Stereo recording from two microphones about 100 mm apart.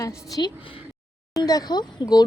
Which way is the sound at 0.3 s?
40° left (ahead or behind).